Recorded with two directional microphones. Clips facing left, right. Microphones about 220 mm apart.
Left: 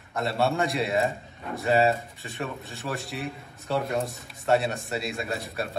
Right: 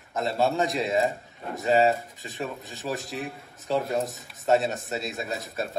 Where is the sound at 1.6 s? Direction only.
15° right (ahead or behind).